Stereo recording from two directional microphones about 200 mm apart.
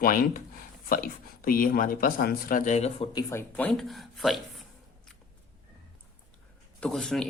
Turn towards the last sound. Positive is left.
turn(degrees=5)  # may be behind; listen again after turning